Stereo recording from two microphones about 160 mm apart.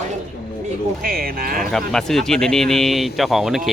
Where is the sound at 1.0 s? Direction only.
65° right (ahead or behind).